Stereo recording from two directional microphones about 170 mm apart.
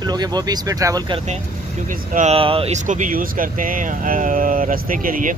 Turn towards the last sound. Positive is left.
turn(degrees=-55)  # may be behind; listen again after turning